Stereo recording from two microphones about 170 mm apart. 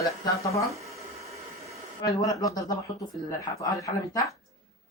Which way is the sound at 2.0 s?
20° left (ahead or behind).